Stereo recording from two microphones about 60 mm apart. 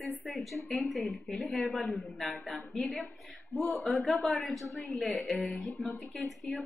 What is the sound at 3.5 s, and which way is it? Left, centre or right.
Speech, left.